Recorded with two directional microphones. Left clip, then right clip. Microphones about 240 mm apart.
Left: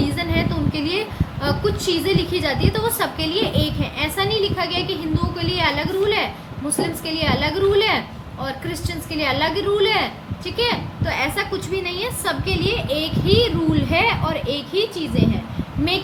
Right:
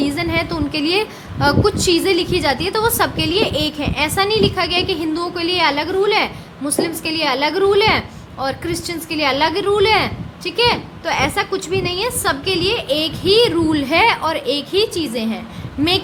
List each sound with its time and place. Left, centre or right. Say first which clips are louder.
0.0 s a woman's voice: right 3 dB; right